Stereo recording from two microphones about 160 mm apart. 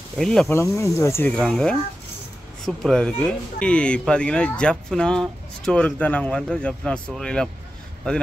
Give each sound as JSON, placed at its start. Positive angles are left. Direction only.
{"t": 0.2, "sound": "speech", "side_deg": 5}
{"t": 0.5, "sound": "speech", "side_deg": 15}